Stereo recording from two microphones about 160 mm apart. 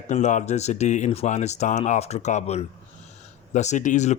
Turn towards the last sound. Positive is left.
turn(degrees=50)  # may be behind; listen again after turning